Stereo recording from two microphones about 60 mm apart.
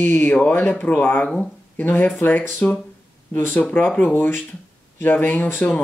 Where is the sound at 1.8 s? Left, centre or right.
Left.